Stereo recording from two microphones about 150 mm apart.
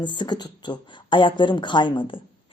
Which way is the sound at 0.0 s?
30° left (ahead or behind).